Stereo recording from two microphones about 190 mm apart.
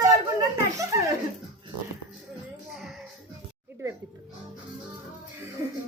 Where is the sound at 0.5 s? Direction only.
15° right (ahead or behind).